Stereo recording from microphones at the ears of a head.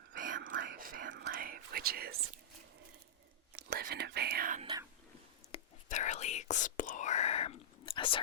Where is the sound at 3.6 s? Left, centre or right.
Right.